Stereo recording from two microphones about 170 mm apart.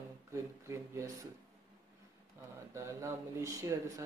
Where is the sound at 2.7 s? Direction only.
15° right (ahead or behind).